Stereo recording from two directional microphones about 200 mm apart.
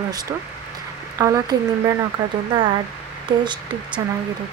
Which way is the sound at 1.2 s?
15° right (ahead or behind).